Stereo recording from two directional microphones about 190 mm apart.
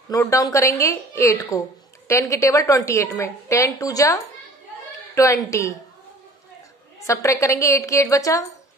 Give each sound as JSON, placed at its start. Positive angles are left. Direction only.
{"t": 0.1, "sound": "a woman's voice", "side_deg": 15}
{"t": 7.1, "sound": "a woman's voice", "side_deg": 15}